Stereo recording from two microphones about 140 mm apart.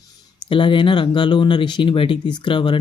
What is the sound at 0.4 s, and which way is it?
Speech, 40° left (ahead or behind).